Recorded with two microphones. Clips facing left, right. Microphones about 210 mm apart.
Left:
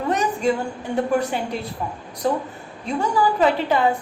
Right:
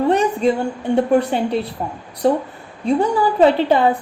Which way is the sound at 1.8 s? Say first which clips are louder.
Right 3 dB; 35° right (ahead or behind).